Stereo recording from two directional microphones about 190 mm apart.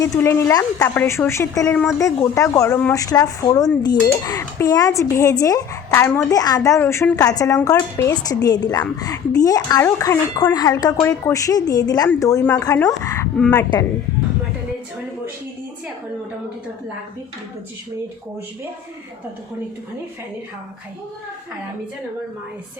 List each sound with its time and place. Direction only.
0.0 s a woman's voice: 15° left (ahead or behind)